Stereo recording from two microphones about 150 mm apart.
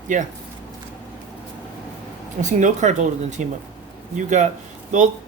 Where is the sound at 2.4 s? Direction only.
55° right (ahead or behind).